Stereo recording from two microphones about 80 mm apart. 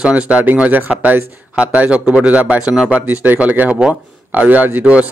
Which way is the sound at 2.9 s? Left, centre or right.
Right.